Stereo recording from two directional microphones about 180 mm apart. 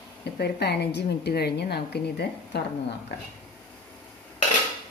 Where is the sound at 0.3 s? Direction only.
65° left (ahead or behind).